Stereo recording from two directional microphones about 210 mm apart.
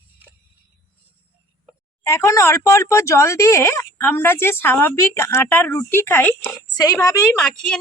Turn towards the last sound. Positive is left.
turn(degrees=5)  # may be behind; listen again after turning